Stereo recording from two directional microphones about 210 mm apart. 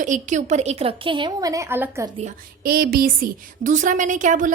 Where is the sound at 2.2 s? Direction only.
45° right (ahead or behind).